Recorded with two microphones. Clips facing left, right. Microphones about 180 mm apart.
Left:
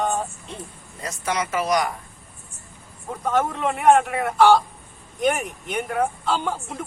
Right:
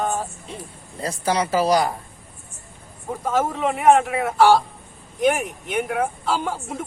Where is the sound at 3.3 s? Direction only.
5° right (ahead or behind).